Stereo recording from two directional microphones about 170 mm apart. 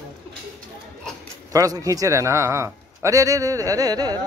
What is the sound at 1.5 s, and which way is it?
A man's voice, 20° right (ahead or behind).